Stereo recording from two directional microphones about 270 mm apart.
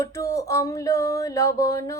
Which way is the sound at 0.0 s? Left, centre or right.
Centre.